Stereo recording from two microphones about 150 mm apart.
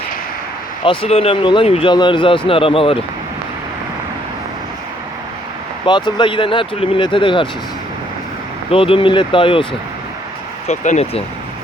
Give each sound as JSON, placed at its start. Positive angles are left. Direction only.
{"t": 0.9, "sound": "speech", "side_deg": 40}
{"t": 5.8, "sound": "speech", "side_deg": 30}
{"t": 8.7, "sound": "speech", "side_deg": 35}
{"t": 10.7, "sound": "speech", "side_deg": 45}